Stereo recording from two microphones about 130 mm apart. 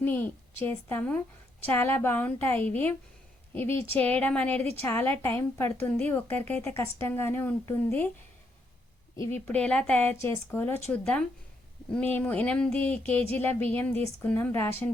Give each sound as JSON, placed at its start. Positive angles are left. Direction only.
{"t": 0.0, "sound": "a woman's voice", "side_deg": 15}
{"t": 9.1, "sound": "a woman's voice", "side_deg": 20}
{"t": 9.5, "sound": "speech", "side_deg": 10}